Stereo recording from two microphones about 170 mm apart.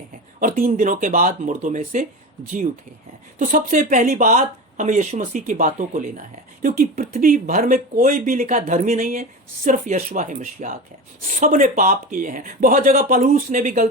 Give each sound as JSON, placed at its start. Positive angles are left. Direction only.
{"t": 0.3, "sound": "speech", "side_deg": -50}
{"t": 3.3, "sound": "speech", "side_deg": -50}